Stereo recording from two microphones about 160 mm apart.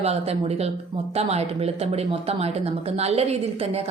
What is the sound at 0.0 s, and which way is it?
Speech, 40° right (ahead or behind).